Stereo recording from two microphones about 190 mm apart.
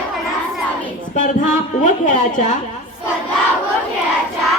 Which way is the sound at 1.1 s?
40° left (ahead or behind).